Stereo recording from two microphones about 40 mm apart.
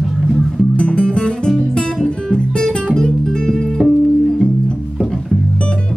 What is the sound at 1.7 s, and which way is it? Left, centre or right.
Guitar, centre.